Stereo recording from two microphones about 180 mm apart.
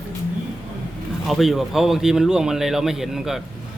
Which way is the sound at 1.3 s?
Centre (ahead or behind).